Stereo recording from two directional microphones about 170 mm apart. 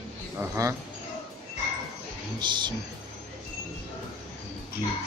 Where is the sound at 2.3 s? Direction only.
25° right (ahead or behind).